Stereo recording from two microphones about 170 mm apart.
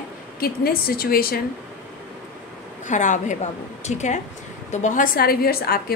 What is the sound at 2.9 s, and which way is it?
A woman's voice, 45° left (ahead or behind).